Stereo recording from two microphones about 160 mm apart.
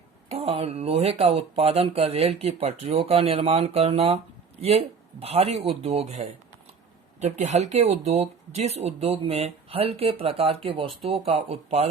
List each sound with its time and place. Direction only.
0.3 s speech: 40° right (ahead or behind)